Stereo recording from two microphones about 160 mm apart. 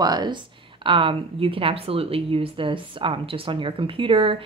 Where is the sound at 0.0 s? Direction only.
25° right (ahead or behind).